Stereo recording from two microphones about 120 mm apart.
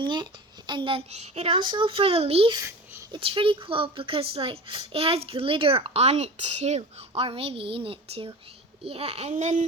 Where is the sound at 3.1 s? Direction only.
45° right (ahead or behind).